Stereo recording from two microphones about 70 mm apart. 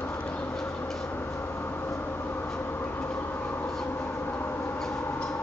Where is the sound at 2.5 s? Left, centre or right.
Left.